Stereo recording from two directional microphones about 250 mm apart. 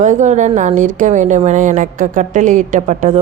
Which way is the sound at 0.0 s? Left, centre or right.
Right.